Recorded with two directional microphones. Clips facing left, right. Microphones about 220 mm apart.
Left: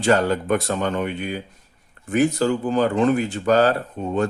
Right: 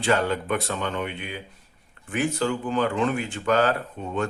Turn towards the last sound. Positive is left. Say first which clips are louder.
# left 5 dB
turn(degrees=35)  # may be behind; listen again after turning